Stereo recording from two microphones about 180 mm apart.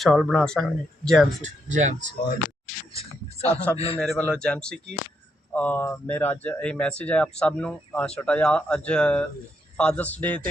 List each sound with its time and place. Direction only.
0.0 s speech: centre (ahead or behind)
1.4 s speech: 40° right (ahead or behind)
2.9 s a sound: 35° left (ahead or behind)
3.5 s speech: 10° left (ahead or behind)